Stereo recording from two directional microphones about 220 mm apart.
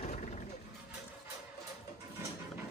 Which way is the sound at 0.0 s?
30° left (ahead or behind).